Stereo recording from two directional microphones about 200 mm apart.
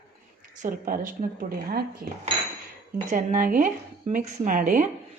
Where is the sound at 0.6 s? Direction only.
45° right (ahead or behind).